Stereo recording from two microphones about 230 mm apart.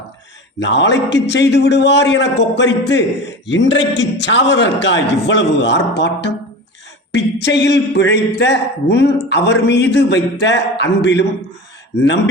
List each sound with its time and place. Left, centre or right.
0.6 s speech: left